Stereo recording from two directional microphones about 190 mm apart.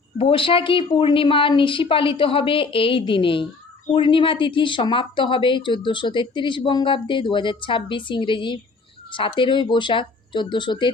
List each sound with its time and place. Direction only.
0.2 s speech: 30° left (ahead or behind)